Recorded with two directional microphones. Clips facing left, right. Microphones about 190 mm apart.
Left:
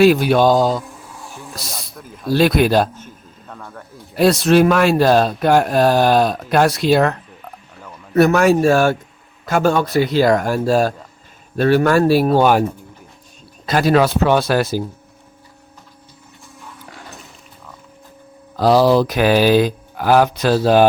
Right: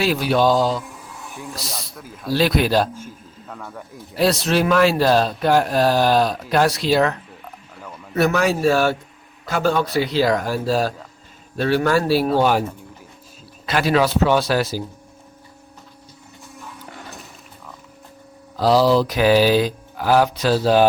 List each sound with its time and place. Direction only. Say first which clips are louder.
0.0 s speech: left 6 dB; 55° left (ahead or behind)
1.2 s music: right 1 dB; 15° right (ahead or behind)
1.7 s a man's voice: even; 5° right (ahead or behind)
2.3 s speech: left 4 dB; 50° left (ahead or behind)
2.9 s speech: right 3 dB; 5° right (ahead or behind)
4.2 s speech: left 6 dB; 50° left (ahead or behind)
8.1 s speech: left 6 dB; 50° left (ahead or behind)
13.7 s speech: left 4 dB; 45° left (ahead or behind)
18.5 s speech: left 3 dB; 55° left (ahead or behind)